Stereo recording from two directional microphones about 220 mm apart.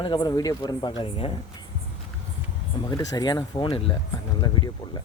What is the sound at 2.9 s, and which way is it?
Speech, 15° left (ahead or behind).